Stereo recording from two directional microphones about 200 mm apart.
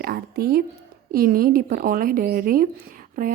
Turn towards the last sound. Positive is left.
turn(degrees=-45)  # may be behind; listen again after turning